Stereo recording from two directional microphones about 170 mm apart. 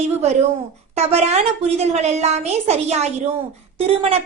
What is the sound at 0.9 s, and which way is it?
A woman's voice, 40° right (ahead or behind).